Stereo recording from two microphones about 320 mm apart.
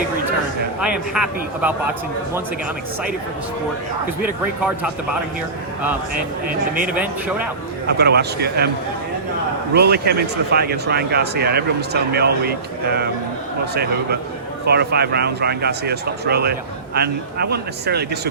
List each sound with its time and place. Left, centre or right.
0.8 s a man's voice: centre
4.2 s a man's voice: centre
6.8 s a man's voice: centre
7.9 s speech: right
9.7 s speech: right
14.7 s speech: right